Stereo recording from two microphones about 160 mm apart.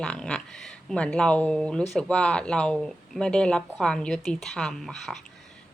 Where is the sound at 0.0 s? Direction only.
5° left (ahead or behind).